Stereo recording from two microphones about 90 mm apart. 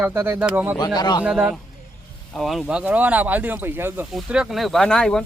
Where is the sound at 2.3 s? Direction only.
Centre (ahead or behind); by 4.0 s 25° right (ahead or behind).